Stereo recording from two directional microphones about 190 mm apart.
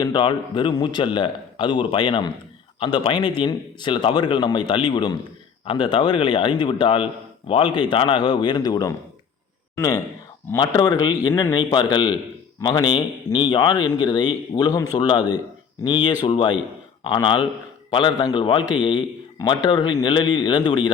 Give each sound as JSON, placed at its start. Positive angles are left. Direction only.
{"t": 0.0, "sound": "a man's voice", "side_deg": 25}